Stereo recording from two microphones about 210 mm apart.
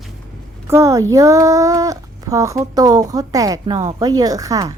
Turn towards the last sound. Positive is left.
turn(degrees=-15)  # may be behind; listen again after turning